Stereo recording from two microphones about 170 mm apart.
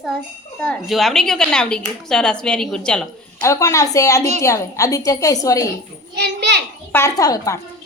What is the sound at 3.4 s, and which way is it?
A woman's voice, 15° left (ahead or behind).